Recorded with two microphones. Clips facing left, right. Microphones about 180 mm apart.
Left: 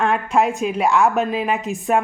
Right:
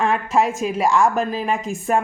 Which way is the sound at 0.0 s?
Centre (ahead or behind).